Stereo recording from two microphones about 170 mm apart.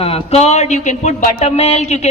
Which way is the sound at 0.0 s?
35° left (ahead or behind).